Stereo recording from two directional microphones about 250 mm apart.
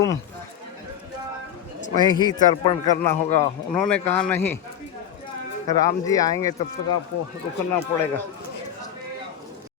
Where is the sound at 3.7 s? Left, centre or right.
Centre.